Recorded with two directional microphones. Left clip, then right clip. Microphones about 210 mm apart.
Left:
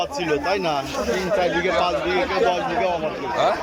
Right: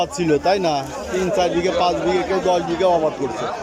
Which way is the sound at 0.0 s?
20° right (ahead or behind).